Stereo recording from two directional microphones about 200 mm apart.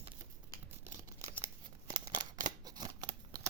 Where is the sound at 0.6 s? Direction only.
15° right (ahead or behind).